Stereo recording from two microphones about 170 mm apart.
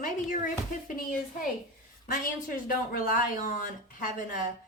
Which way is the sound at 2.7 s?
55° left (ahead or behind).